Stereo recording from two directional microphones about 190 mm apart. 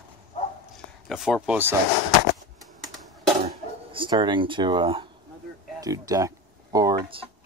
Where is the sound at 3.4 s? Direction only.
25° right (ahead or behind).